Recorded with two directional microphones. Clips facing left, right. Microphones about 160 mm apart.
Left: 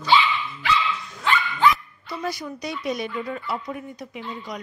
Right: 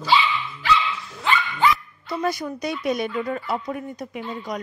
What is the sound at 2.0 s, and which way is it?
Speech, 50° right (ahead or behind).